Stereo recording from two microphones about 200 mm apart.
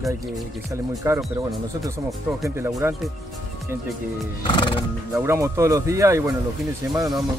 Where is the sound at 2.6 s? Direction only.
15° right (ahead or behind).